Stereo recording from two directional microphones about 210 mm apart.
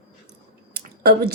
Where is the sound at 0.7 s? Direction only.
50° right (ahead or behind).